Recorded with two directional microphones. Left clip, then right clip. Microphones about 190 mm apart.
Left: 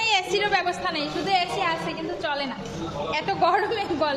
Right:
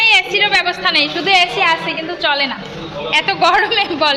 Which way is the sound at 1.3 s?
20° right (ahead or behind).